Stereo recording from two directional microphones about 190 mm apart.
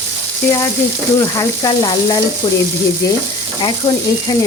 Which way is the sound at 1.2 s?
20° left (ahead or behind).